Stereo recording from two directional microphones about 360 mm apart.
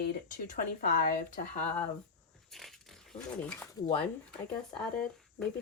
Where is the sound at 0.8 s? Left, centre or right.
Left.